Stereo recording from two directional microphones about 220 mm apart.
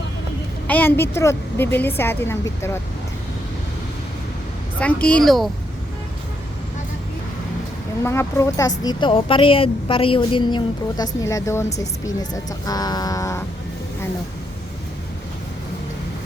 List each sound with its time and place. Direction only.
0.7 s a woman's voice: 10° left (ahead or behind)
4.8 s speech: 5° left (ahead or behind)
8.0 s a woman's voice: 10° left (ahead or behind)